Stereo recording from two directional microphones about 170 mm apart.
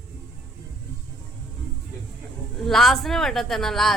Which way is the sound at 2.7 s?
Centre (ahead or behind).